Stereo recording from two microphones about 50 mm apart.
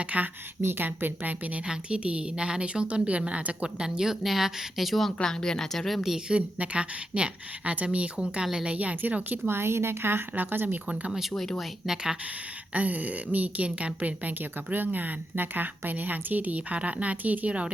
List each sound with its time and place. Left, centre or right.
0.0 s a woman's voice: right
0.6 s a woman's voice: right
0.9 s a woman's voice: right
1.6 s a woman's voice: centre
6.0 s a woman's voice: centre; by 9.0 s right
9.5 s a woman's voice: right
11.1 s a woman's voice: centre
12.7 s a woman's voice: right